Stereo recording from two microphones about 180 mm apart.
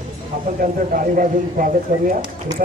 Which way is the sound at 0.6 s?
50° right (ahead or behind).